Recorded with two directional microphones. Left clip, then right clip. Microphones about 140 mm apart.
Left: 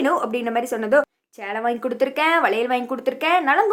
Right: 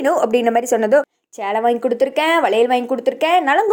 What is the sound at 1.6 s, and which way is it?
Speech, 25° right (ahead or behind).